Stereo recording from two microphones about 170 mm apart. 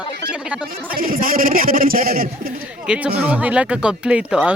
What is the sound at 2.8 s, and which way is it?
Speech, 5° right (ahead or behind).